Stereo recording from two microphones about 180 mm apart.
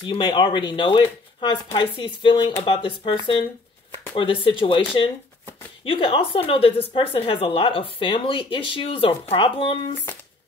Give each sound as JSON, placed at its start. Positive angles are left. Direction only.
{"t": 0.0, "sound": "a woman's voice", "side_deg": 25}